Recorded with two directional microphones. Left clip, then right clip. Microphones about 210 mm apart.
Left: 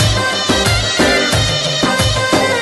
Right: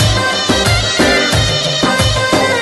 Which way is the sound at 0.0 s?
Centre (ahead or behind).